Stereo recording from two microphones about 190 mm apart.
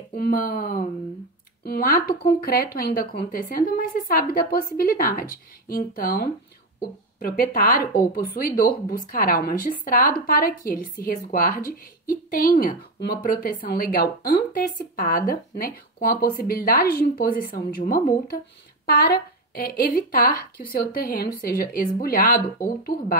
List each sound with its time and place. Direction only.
0.1 s speech: 50° left (ahead or behind)